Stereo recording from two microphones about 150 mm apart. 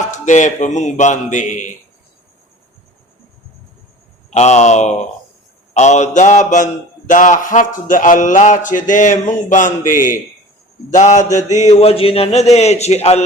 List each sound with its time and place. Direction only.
0.1 s a man's voice: 55° left (ahead or behind)
4.3 s a man's voice: 50° left (ahead or behind)
10.9 s a man's voice: 55° left (ahead or behind)
11.7 s speech: 40° left (ahead or behind)